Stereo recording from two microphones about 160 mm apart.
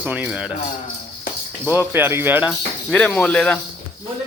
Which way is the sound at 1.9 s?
15° right (ahead or behind).